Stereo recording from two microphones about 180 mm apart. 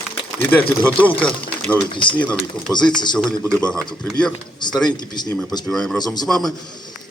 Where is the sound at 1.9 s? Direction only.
25° left (ahead or behind).